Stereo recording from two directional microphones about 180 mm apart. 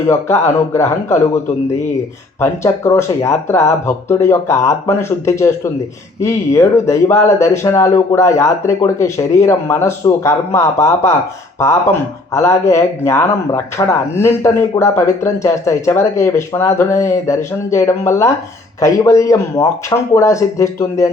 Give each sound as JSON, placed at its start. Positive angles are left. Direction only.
{"t": 0.1, "sound": "speech", "side_deg": 15}
{"t": 2.4, "sound": "speech", "side_deg": 15}